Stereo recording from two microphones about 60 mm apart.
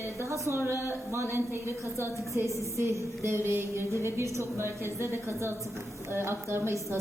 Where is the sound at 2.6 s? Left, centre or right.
Right.